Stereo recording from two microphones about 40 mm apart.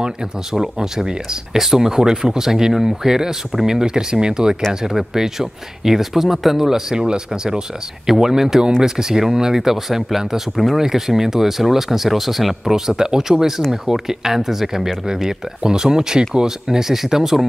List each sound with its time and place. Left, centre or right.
0.0 s speech: centre
12.7 s speech: centre